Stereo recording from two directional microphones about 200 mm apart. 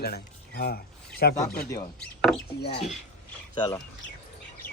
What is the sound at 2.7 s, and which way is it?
Speech, 30° left (ahead or behind).